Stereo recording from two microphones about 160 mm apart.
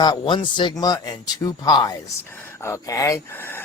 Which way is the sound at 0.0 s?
25° left (ahead or behind).